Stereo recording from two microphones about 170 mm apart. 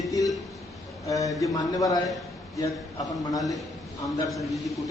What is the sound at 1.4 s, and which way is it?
Speech, 20° left (ahead or behind).